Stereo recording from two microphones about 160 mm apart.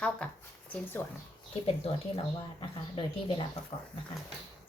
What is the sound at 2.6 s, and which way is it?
Speech, 30° left (ahead or behind).